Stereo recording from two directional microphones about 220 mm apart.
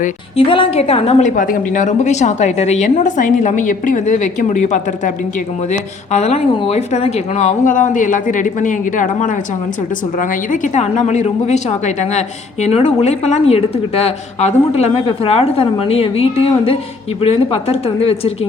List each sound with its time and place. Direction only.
0.0 s a woman's voice: 25° left (ahead or behind)